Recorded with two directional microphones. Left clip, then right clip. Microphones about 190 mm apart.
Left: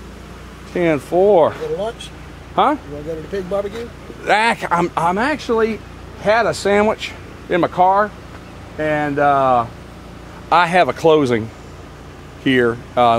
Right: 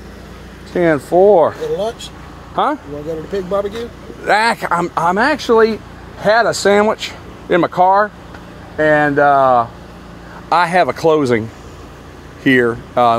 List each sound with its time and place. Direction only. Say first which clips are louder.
0.7 s speech: right 3 dB; centre (ahead or behind)
1.1 s speech: right 3 dB; 15° right (ahead or behind)
2.5 s speech: left 1 dB; 20° right (ahead or behind)
4.2 s speech: right 2 dB; 5° right (ahead or behind)
10.5 s speech: right 1 dB; 5° right (ahead or behind)
12.4 s speech: right 3 dB; 10° right (ahead or behind)